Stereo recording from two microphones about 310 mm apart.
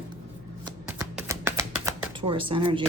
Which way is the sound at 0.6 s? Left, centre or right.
Centre.